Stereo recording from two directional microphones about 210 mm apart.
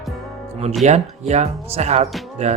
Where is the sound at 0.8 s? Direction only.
30° right (ahead or behind).